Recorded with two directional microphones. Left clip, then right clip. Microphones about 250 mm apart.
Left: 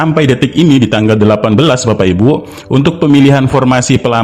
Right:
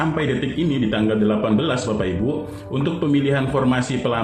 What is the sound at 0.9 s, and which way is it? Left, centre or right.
Speech, left.